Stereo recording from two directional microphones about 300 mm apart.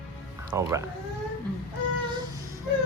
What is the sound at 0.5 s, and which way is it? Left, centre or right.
Speech, centre.